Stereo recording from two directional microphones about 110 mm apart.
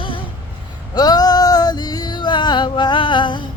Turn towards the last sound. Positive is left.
turn(degrees=45)  # may be behind; listen again after turning